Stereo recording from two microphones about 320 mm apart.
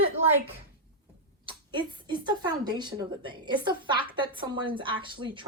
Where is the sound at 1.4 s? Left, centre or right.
Centre.